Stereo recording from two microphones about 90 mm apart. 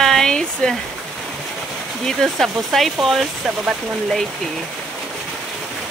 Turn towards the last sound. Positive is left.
turn(degrees=0)  # may be behind; listen again after turning